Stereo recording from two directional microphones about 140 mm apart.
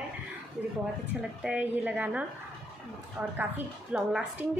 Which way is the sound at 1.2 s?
10° right (ahead or behind).